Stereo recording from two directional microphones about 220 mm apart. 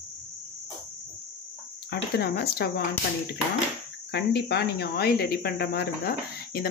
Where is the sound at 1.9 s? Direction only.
45° left (ahead or behind).